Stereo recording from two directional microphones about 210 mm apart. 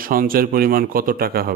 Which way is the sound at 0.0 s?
45° right (ahead or behind).